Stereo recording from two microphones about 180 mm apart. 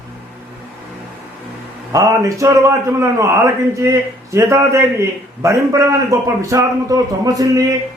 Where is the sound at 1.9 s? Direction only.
20° right (ahead or behind).